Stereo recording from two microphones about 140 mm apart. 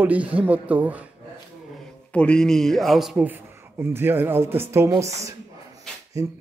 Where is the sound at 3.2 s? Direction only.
15° right (ahead or behind).